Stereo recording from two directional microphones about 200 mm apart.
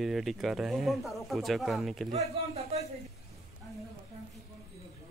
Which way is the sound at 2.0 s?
30° right (ahead or behind).